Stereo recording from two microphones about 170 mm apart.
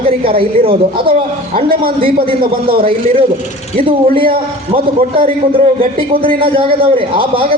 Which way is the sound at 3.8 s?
30° right (ahead or behind).